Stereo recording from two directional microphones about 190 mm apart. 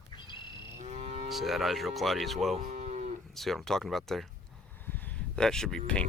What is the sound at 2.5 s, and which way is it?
Moo, 40° right (ahead or behind).